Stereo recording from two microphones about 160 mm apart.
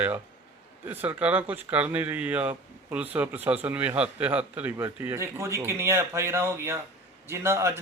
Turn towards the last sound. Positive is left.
turn(degrees=-15)  # may be behind; listen again after turning